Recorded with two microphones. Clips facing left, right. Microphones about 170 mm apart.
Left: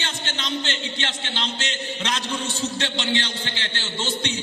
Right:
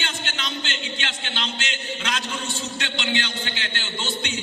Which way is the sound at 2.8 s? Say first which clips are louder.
Right 1 dB; 35° left (ahead or behind).